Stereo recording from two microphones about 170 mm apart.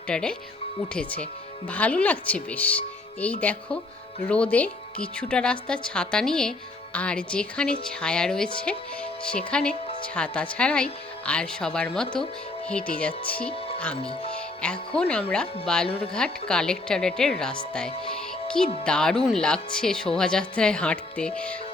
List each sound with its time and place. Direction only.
0.1 s a woman's voice: 5° left (ahead or behind)
14.0 s speech: 35° left (ahead or behind)
14.6 s a woman's voice: 5° left (ahead or behind)